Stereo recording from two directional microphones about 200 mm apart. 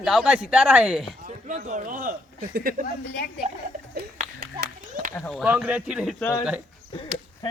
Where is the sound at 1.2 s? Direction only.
35° right (ahead or behind).